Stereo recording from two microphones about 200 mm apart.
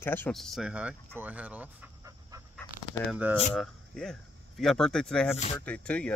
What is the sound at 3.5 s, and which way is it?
Speech, centre (ahead or behind).